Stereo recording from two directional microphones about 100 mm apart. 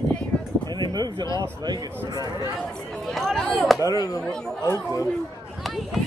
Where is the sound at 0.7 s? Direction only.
45° right (ahead or behind).